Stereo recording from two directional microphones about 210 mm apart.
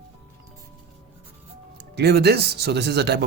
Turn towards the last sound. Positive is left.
turn(degrees=-50)  # may be behind; listen again after turning